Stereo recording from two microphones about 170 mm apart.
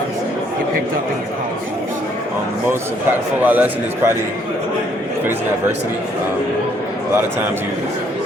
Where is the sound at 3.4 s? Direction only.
10° right (ahead or behind).